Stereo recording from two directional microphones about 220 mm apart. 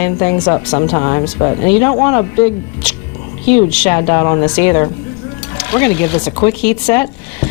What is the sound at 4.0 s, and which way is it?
Speech, 15° left (ahead or behind).